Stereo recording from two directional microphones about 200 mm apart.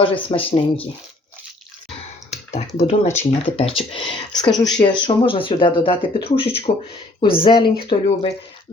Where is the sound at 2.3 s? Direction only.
35° left (ahead or behind).